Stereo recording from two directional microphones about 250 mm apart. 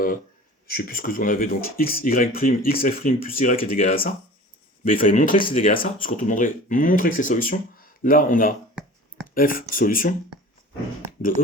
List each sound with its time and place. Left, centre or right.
0.7 s speech: left